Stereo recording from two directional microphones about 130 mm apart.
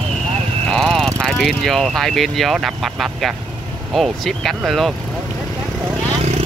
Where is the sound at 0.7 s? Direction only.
5° left (ahead or behind).